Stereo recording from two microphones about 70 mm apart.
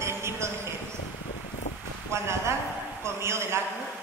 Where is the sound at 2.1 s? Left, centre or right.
Right.